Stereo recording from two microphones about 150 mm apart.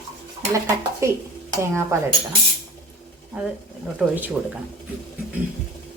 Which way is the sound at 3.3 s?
10° right (ahead or behind).